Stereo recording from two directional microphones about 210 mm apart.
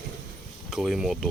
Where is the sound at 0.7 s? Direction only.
Centre (ahead or behind).